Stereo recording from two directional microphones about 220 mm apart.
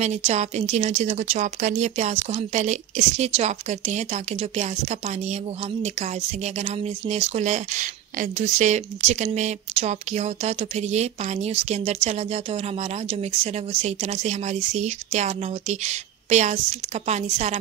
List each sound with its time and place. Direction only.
0.0 s speech: 30° right (ahead or behind)